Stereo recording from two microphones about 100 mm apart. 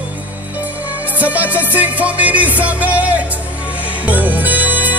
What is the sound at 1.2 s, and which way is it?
Music, 15° right (ahead or behind).